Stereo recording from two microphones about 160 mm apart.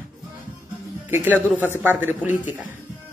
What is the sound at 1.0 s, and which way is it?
Speech, 15° right (ahead or behind).